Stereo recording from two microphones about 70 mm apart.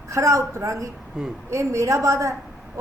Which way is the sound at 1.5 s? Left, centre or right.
Right.